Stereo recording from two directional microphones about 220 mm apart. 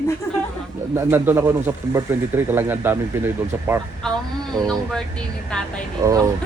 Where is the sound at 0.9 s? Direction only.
10° right (ahead or behind).